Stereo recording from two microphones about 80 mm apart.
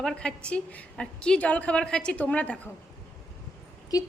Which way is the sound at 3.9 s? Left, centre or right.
Left.